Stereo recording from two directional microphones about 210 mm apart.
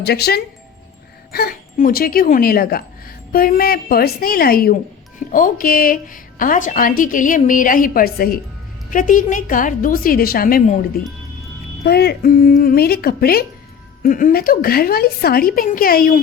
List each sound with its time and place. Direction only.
0.0 s a woman's voice: 50° left (ahead or behind)
11.8 s a woman's voice: 50° left (ahead or behind)